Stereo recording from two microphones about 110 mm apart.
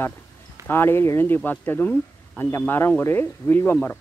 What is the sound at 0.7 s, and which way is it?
Speech, 20° left (ahead or behind).